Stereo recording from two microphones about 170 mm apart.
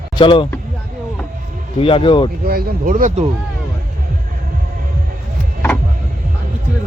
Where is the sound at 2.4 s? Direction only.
60° right (ahead or behind).